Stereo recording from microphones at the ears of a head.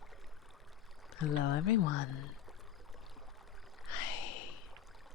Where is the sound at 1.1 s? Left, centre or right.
Left.